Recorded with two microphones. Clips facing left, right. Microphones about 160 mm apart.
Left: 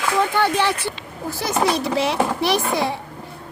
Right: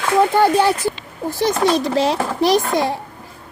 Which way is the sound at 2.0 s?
40° right (ahead or behind).